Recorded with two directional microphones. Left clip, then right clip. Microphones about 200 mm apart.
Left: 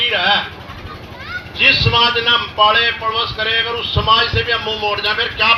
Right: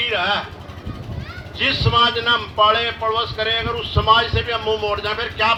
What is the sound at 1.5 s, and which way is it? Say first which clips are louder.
A man's voice: left 5 dB; 25° left (ahead or behind).